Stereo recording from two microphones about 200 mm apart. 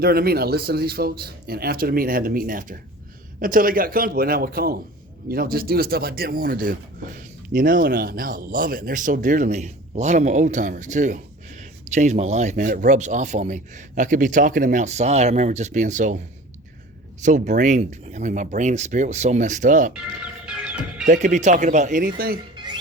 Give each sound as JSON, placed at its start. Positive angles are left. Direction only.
{"t": 0.0, "sound": "speech", "side_deg": -50}
{"t": 19.9, "sound": "music", "side_deg": -5}
{"t": 21.1, "sound": "speech", "side_deg": -40}